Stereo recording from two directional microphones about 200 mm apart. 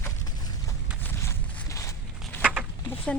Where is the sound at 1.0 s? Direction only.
10° left (ahead or behind).